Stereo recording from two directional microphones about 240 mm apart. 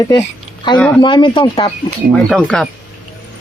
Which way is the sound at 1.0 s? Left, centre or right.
Centre.